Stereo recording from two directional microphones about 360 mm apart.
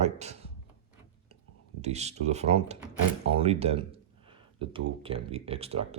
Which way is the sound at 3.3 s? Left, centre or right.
Centre.